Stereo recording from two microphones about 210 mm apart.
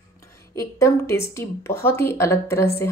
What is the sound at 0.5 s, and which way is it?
Speech, 15° left (ahead or behind).